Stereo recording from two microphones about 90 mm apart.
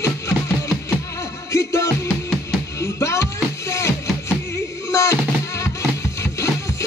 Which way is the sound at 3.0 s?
35° left (ahead or behind).